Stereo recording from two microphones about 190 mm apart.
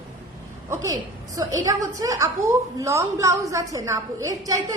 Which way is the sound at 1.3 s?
20° right (ahead or behind).